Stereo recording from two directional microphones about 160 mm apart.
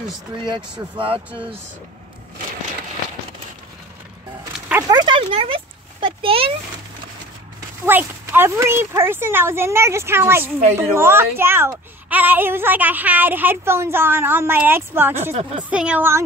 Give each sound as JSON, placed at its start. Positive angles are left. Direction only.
{"t": 0.4, "sound": "speech", "side_deg": -30}
{"t": 4.8, "sound": "a sound", "side_deg": -25}
{"t": 7.8, "sound": "speech", "side_deg": -15}